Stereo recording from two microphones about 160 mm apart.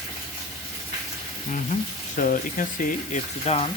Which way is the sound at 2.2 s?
60° left (ahead or behind).